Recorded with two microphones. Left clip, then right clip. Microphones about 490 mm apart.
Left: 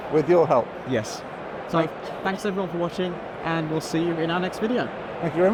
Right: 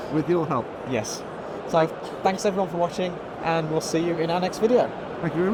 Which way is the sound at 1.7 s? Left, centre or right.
Centre.